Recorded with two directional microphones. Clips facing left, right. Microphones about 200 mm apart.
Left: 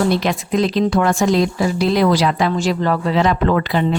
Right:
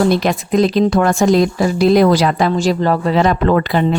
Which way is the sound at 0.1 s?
45° right (ahead or behind).